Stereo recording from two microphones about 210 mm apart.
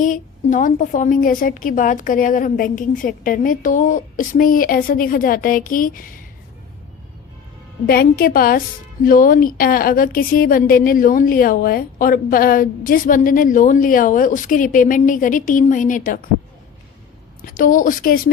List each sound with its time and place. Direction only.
0.0 s speech: 40° left (ahead or behind)
7.9 s a woman's voice: 45° left (ahead or behind)
17.4 s speech: 40° left (ahead or behind)